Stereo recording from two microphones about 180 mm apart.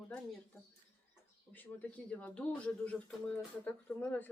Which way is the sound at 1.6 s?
10° left (ahead or behind).